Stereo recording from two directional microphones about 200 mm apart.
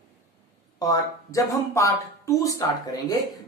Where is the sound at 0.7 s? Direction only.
15° left (ahead or behind).